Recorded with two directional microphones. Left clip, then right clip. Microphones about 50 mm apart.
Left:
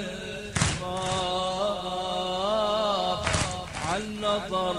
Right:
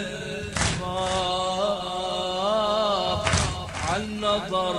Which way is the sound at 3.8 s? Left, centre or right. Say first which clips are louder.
Right 3 dB; left.